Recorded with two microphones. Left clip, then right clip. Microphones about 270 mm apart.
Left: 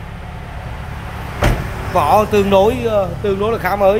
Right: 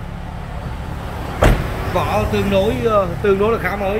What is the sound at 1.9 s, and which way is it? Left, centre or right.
Speech, centre.